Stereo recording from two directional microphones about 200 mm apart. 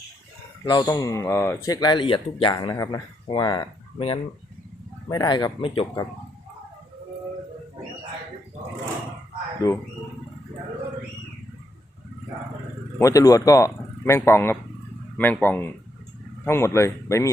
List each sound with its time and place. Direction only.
0.6 s speech: 20° left (ahead or behind)
5.0 s speech: 20° left (ahead or behind)
13.0 s a man's voice: 15° left (ahead or behind)